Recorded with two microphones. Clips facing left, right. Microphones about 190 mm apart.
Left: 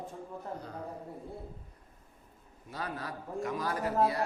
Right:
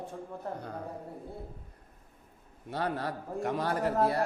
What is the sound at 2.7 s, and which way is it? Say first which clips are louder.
A man's voice: right 6 dB; 65° right (ahead or behind).